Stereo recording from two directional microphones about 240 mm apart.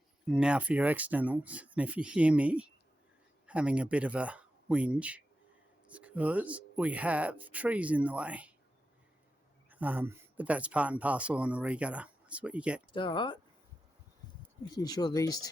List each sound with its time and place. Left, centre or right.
0.3 s speech: centre
9.6 s speech: centre
12.9 s speech: centre
14.7 s speech: centre